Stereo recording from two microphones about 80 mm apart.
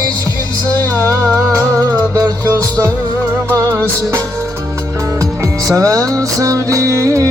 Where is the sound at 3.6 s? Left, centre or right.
Right.